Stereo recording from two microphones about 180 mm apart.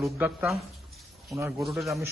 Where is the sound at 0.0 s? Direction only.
Centre (ahead or behind).